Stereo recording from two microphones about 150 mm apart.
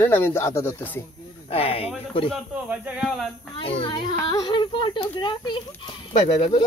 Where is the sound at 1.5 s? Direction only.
40° left (ahead or behind).